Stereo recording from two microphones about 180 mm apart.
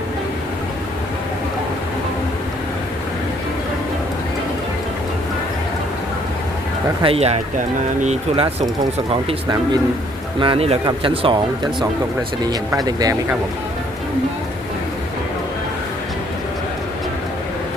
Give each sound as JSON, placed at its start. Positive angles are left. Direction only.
{"t": 7.0, "sound": "speech", "side_deg": -35}
{"t": 10.4, "sound": "speech", "side_deg": -30}